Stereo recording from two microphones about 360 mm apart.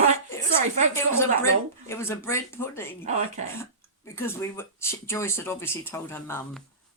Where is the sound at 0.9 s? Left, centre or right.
Centre.